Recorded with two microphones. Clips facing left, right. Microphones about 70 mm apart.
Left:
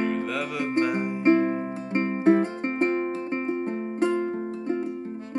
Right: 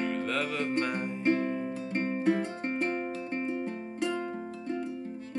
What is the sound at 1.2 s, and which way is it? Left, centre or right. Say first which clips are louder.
Music: left 7 dB; left.